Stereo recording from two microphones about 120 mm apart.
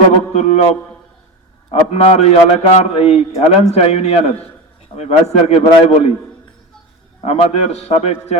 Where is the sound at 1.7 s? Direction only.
60° left (ahead or behind).